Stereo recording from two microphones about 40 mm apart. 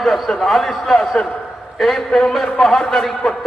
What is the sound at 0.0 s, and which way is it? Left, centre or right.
A man's voice, centre.